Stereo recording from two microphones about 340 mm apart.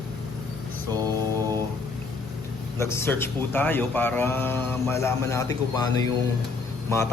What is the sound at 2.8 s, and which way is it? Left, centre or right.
Speech, centre.